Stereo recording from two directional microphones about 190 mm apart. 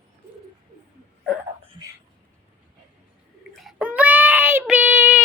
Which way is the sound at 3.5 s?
Centre (ahead or behind).